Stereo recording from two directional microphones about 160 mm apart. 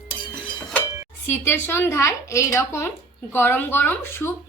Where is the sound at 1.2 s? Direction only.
15° left (ahead or behind).